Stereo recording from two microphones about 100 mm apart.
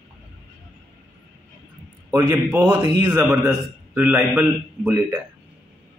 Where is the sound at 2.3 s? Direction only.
15° right (ahead or behind).